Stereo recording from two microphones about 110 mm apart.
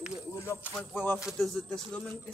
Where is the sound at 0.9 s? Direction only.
15° left (ahead or behind).